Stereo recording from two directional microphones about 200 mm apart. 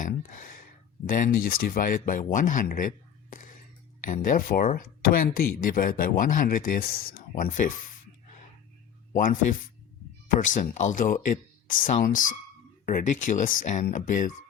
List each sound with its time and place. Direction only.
0.0 s a sound: 40° left (ahead or behind)
1.0 s speech: 45° left (ahead or behind)
9.1 s speech: 40° left (ahead or behind)